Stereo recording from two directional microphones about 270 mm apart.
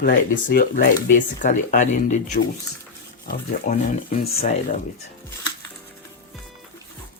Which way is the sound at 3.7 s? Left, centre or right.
Left.